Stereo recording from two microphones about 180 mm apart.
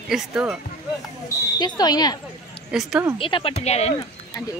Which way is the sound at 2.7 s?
5° right (ahead or behind).